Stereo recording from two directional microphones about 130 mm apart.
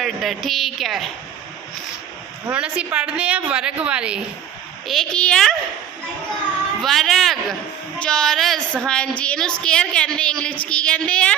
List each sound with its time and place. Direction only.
0.0 s speech: centre (ahead or behind)
2.5 s a woman's voice: 10° right (ahead or behind)
4.9 s speech: 5° left (ahead or behind)
6.8 s a woman's voice: centre (ahead or behind)